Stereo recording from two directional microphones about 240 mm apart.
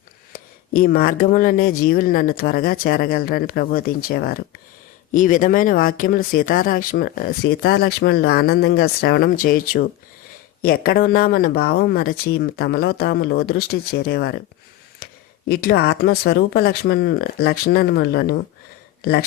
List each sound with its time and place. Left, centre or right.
0.3 s speech: left